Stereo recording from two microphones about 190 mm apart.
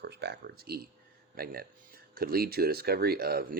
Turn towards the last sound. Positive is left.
turn(degrees=-55)  # may be behind; listen again after turning